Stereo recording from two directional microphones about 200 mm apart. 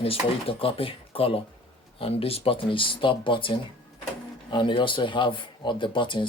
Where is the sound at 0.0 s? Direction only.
30° left (ahead or behind).